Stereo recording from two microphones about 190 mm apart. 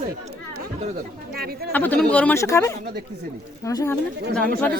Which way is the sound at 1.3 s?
55° right (ahead or behind).